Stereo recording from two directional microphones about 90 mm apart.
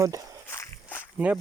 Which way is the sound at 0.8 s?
20° left (ahead or behind).